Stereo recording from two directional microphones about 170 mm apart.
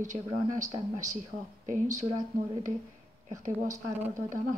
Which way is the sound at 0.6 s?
45° right (ahead or behind).